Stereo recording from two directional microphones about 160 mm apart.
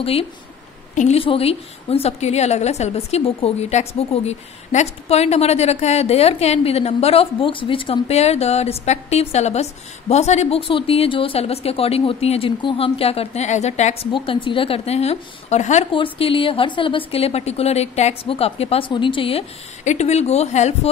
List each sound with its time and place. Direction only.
0.0 s a woman's voice: 35° left (ahead or behind)
14.1 s a woman's voice: 30° left (ahead or behind)
15.9 s a woman's voice: 35° left (ahead or behind)
19.8 s speech: 45° left (ahead or behind)